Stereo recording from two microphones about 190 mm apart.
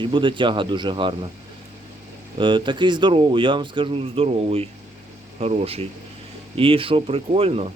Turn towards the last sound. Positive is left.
turn(degrees=-30)  # may be behind; listen again after turning